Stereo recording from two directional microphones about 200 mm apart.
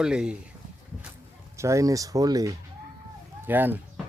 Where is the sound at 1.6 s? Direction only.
15° right (ahead or behind).